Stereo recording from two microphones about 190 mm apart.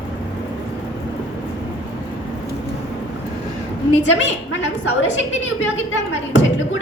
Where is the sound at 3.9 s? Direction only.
85° left.